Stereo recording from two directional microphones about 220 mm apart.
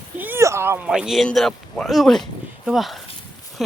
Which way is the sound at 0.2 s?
10° right (ahead or behind).